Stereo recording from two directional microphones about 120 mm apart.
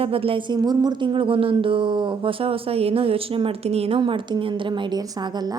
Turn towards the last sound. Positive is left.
turn(degrees=-35)  # may be behind; listen again after turning